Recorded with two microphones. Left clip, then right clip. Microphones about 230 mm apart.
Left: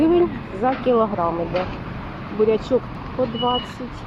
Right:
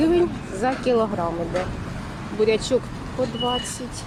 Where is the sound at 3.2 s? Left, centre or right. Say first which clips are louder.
Left 2 dB; centre.